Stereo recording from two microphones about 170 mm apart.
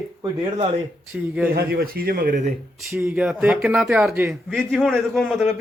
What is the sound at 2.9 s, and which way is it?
Speech, 10° right (ahead or behind).